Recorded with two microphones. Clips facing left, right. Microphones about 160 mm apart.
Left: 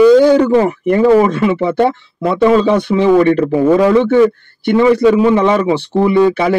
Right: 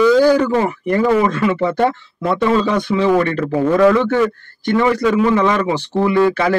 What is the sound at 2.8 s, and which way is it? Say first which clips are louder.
Speech: left 5 dB; 20° left (ahead or behind).